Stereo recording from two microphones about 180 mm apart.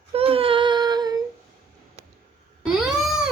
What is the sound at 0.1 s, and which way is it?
Child singing, 30° right (ahead or behind).